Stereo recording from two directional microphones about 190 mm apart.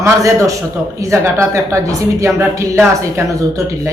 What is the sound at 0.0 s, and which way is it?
Speech, 15° right (ahead or behind).